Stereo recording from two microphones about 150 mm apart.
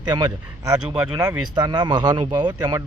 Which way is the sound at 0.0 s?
30° right (ahead or behind).